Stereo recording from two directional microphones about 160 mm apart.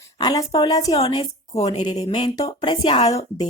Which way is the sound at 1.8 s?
35° left (ahead or behind).